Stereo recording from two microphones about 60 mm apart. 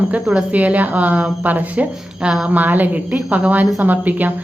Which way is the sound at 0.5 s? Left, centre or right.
Right.